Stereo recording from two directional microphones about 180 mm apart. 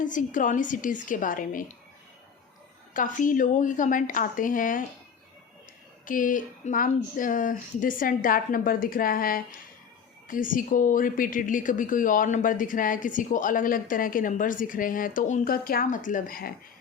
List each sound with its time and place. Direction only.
0.0 s speech: 45° left (ahead or behind)
2.9 s speech: 50° left (ahead or behind)
6.1 s speech: 50° left (ahead or behind)